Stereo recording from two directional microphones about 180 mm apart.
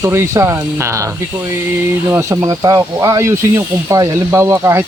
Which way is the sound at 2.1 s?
15° right (ahead or behind).